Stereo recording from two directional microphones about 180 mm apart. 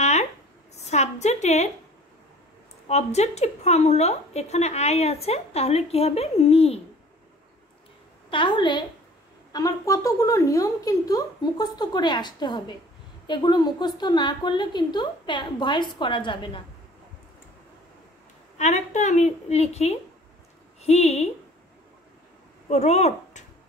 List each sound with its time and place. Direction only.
0.0 s a sound: 40° left (ahead or behind)
2.9 s a woman's voice: 35° left (ahead or behind)
8.3 s a woman's voice: 30° left (ahead or behind)
18.6 s a woman's voice: 40° left (ahead or behind)
22.7 s speech: 35° left (ahead or behind)